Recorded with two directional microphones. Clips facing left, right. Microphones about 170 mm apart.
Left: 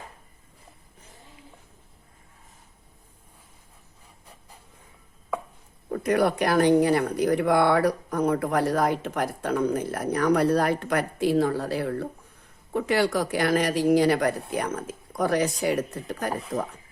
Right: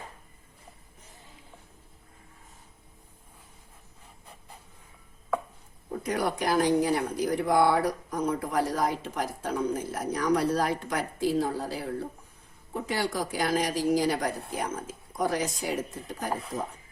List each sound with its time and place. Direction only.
5.9 s speech: 65° left (ahead or behind)